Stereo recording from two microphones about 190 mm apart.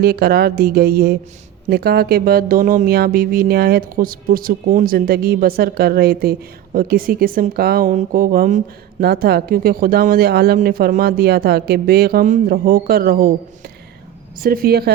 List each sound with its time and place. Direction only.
0.0 s speech: 55° right (ahead or behind)
14.4 s speech: 50° right (ahead or behind)